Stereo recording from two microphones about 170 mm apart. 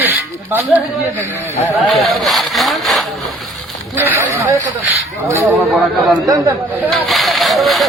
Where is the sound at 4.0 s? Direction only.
15° right (ahead or behind).